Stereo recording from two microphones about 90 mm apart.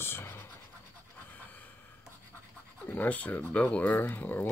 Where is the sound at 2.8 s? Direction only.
20° left (ahead or behind).